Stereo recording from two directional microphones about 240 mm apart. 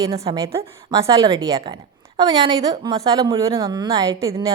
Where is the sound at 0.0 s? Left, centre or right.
Centre.